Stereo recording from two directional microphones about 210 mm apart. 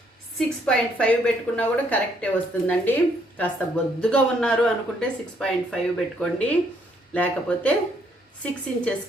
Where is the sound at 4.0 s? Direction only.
5° left (ahead or behind).